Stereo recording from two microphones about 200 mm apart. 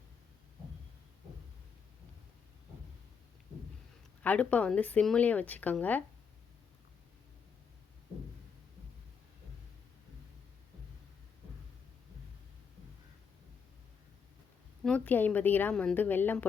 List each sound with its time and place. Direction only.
4.2 s speech: 5° left (ahead or behind)
14.8 s speech: 5° left (ahead or behind)